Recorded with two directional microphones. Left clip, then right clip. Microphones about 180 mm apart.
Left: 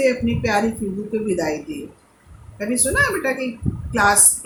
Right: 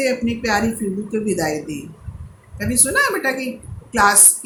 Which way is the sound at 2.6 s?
35° right (ahead or behind).